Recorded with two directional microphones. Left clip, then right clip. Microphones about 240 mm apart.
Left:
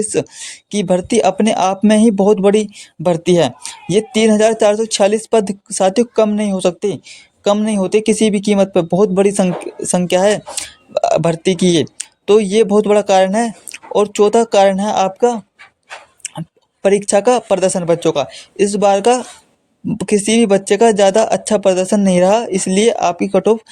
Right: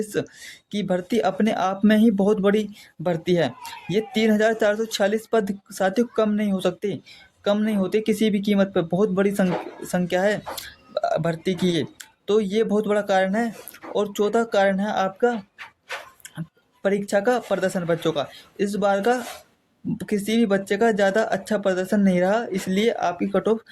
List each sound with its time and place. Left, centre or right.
0.0 s speech: left
16.8 s speech: left